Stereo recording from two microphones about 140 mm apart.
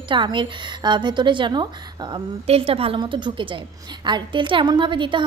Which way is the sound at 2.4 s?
45° right (ahead or behind).